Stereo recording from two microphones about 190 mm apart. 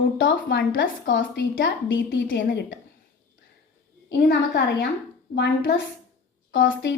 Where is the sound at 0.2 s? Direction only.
70° left (ahead or behind).